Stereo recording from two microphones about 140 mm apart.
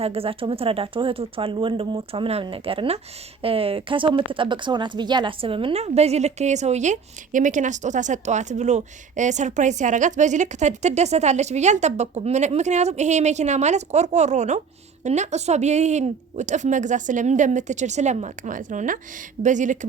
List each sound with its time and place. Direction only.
0.0 s speech: 45° right (ahead or behind); by 19.8 s 60° right (ahead or behind)